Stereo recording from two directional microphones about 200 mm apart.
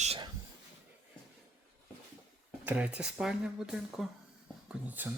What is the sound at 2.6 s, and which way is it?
Speech, 5° right (ahead or behind).